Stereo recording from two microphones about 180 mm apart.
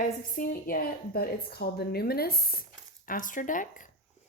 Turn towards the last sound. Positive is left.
turn(degrees=45)  # may be behind; listen again after turning